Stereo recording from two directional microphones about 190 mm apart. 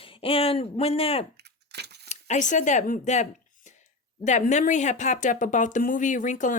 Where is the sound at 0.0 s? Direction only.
30° left (ahead or behind).